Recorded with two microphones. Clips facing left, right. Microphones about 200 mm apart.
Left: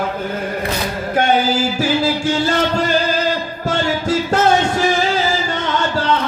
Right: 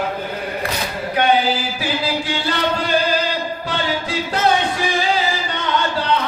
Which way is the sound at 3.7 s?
45° left (ahead or behind).